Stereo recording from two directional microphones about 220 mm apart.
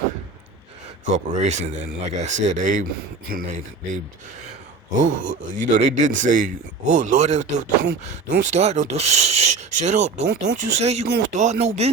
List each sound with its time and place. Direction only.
1.0 s speech: 30° right (ahead or behind)
5.0 s speech: 35° right (ahead or behind)